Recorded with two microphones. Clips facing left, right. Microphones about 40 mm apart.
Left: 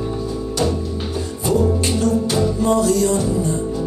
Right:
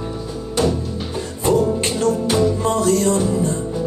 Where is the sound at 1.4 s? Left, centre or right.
Right.